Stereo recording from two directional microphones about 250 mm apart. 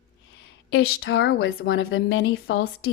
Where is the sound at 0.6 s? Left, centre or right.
Left.